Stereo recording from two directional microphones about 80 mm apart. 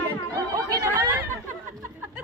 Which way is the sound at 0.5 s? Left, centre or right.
Right.